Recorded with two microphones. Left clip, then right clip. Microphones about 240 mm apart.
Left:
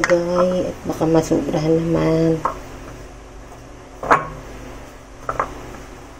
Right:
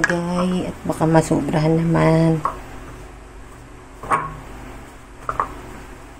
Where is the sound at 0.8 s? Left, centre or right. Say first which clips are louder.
Right 1 dB; right.